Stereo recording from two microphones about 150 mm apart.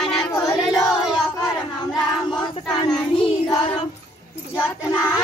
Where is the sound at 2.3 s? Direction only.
25° left (ahead or behind).